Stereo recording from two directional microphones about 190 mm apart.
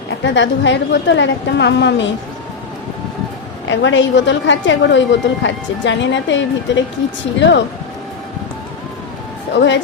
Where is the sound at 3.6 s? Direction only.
75° left (ahead or behind).